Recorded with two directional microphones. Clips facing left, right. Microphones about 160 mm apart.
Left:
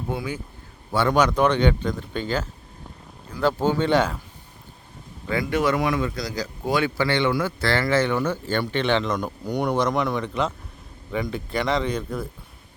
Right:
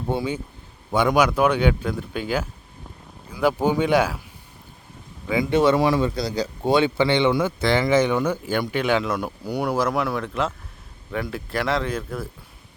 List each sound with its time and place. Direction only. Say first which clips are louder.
0.1 s a man's voice: right 5 dB; 25° right (ahead or behind)
0.9 s speech: right 1 dB; 15° right (ahead or behind)
5.3 s speech: right 4 dB; 20° right (ahead or behind); by 12.3 s 5° right (ahead or behind)